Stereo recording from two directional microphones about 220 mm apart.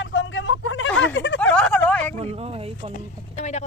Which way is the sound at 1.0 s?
55° left (ahead or behind).